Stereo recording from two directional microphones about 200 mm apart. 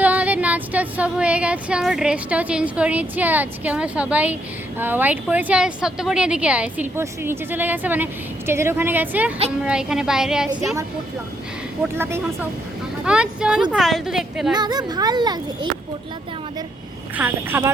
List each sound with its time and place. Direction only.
0.0 s a woman's voice: 10° right (ahead or behind)
11.8 s a woman's voice: 10° right (ahead or behind)
14.5 s speech: 20° right (ahead or behind)
17.2 s a woman's voice: 10° right (ahead or behind)